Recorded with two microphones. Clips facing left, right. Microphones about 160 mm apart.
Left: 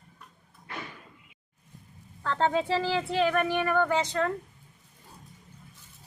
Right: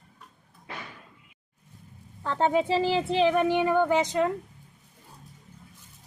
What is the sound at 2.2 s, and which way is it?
Speech, 15° right (ahead or behind).